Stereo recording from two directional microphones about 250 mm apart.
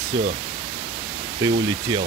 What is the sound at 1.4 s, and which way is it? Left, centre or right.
Speech, centre.